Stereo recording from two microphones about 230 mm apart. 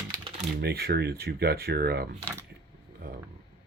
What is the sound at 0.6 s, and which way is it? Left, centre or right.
Speech, right.